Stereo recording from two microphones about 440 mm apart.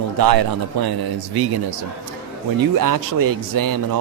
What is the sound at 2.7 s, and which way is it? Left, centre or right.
Speech, right.